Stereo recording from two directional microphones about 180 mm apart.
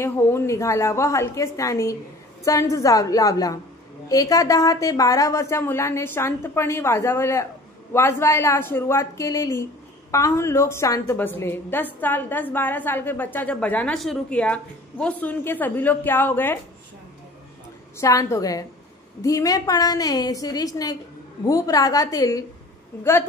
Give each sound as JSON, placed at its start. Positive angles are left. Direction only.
{"t": 0.0, "sound": "a woman's voice", "side_deg": 15}
{"t": 17.9, "sound": "a woman's voice", "side_deg": 15}